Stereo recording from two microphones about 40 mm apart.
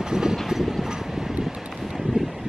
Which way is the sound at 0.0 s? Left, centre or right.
Centre.